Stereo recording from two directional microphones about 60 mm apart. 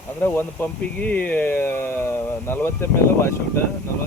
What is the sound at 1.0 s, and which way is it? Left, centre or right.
Speech, left.